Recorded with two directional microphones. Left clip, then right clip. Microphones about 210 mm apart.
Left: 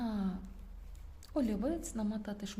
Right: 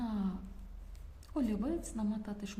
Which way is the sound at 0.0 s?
30° left (ahead or behind).